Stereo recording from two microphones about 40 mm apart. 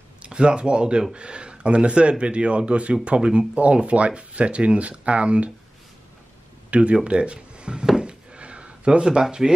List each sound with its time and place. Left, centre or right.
0.2 s speech: right
6.7 s speech: right
8.0 s a sound: right